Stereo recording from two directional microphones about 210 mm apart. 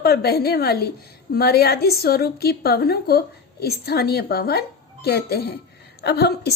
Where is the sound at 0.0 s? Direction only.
50° left (ahead or behind).